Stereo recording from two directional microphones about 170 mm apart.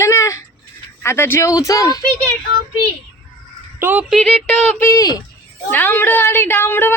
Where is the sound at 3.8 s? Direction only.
10° right (ahead or behind); by 7.0 s 10° left (ahead or behind).